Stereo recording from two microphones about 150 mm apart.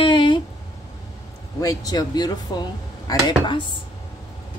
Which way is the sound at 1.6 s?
25° left (ahead or behind).